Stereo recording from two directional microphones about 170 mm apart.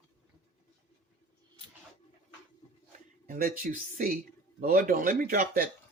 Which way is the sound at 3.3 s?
55° right (ahead or behind).